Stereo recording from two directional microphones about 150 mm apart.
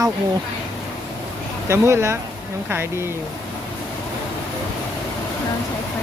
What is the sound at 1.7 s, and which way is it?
Speech, 20° right (ahead or behind).